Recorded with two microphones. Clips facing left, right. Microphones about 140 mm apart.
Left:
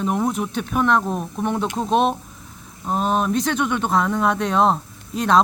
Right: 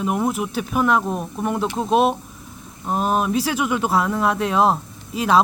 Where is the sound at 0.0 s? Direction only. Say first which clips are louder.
Even; 5° right (ahead or behind).